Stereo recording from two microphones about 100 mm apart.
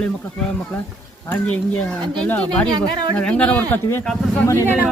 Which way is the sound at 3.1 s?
10° left (ahead or behind).